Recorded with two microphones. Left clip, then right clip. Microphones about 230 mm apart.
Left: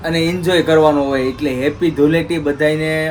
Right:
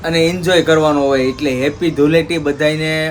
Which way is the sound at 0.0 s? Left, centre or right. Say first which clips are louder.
Right 3 dB; centre.